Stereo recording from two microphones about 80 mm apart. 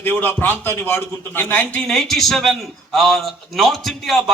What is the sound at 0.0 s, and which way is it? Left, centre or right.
A man's voice, left.